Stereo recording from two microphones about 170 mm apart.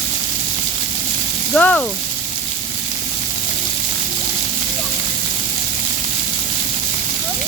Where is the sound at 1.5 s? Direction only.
10° left (ahead or behind).